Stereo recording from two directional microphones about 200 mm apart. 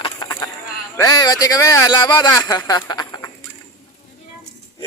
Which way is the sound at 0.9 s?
15° left (ahead or behind).